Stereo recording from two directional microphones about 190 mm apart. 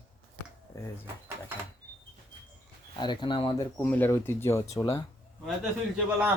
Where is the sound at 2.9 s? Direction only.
25° left (ahead or behind).